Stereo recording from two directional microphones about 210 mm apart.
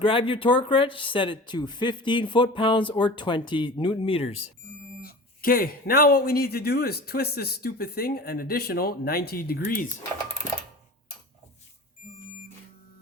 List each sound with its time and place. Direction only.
0.0 s speech: 25° left (ahead or behind)
5.0 s speech: 45° left (ahead or behind)